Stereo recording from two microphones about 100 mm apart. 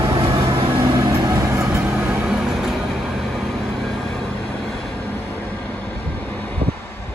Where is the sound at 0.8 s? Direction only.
40° right (ahead or behind).